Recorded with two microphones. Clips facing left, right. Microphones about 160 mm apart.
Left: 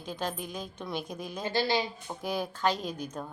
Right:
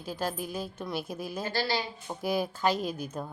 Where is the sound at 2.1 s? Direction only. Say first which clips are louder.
Right 3 dB; 10° right (ahead or behind).